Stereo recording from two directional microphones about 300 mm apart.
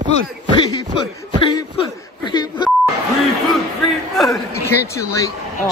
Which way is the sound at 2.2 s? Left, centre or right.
Centre.